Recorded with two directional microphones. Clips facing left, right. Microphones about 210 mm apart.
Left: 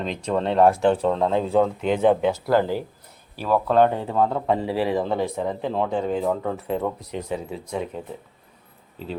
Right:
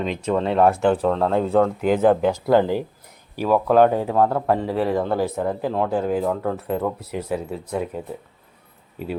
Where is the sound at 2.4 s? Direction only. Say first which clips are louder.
Right 5 dB; 20° right (ahead or behind).